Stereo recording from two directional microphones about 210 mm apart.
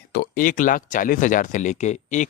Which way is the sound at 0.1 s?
45° left (ahead or behind).